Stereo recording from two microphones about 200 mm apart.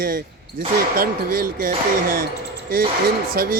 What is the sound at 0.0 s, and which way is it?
Speech, 50° right (ahead or behind).